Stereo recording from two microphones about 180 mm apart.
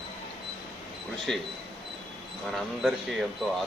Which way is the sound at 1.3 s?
Centre (ahead or behind).